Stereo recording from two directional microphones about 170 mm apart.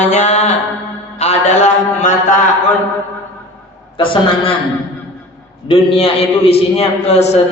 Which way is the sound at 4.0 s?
30° left (ahead or behind).